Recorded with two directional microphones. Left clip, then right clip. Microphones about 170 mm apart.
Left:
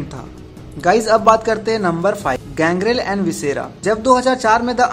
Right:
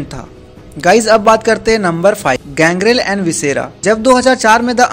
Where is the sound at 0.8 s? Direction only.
35° right (ahead or behind).